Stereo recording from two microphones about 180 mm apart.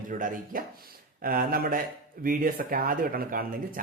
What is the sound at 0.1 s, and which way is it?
Speech, 45° right (ahead or behind).